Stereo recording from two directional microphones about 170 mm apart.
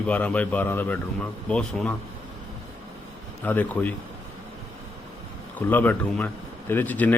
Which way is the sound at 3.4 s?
10° left (ahead or behind).